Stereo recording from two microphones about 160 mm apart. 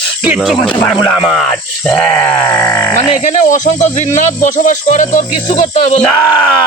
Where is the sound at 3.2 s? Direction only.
50° left (ahead or behind).